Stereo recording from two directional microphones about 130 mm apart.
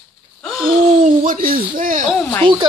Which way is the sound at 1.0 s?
90° right.